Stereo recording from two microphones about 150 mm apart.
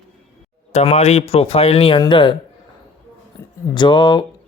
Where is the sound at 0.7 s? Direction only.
50° left (ahead or behind).